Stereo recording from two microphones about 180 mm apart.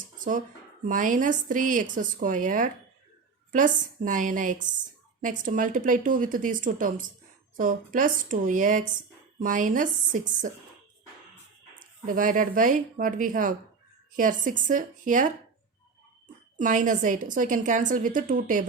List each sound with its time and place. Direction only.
0.2 s speech: 45° right (ahead or behind)
12.0 s speech: 50° right (ahead or behind)
16.6 s speech: 45° right (ahead or behind)